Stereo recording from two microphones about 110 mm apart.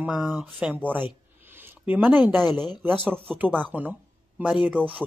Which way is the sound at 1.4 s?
20° right (ahead or behind).